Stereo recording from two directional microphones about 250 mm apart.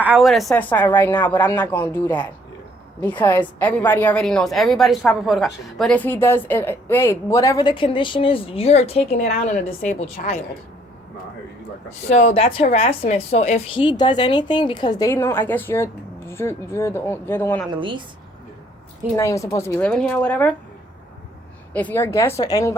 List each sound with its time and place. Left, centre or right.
0.0 s a woman's voice: centre; by 10.4 s left
12.0 s a woman's voice: left; by 17.7 s centre
17.7 s a woman's voice: centre
19.1 s a woman's voice: centre
21.7 s a woman's voice: centre